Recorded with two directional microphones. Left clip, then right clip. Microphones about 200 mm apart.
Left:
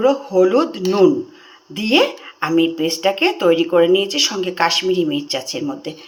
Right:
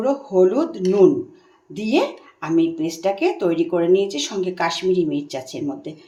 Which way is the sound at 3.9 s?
35° right (ahead or behind).